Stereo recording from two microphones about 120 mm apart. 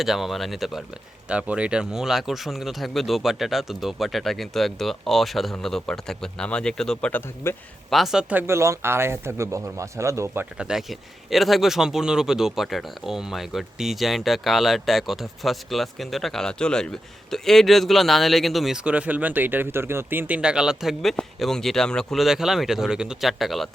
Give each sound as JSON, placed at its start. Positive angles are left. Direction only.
{"t": 0.0, "sound": "speech", "side_deg": 0}
{"t": 7.4, "sound": "a man's voice", "side_deg": 20}
{"t": 7.9, "sound": "speech", "side_deg": 0}
{"t": 10.6, "sound": "speech", "side_deg": -5}